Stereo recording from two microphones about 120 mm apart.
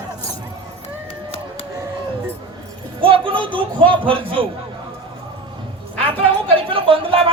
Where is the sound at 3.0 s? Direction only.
50° right (ahead or behind).